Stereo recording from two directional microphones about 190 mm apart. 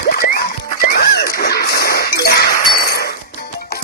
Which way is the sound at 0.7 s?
55° left (ahead or behind).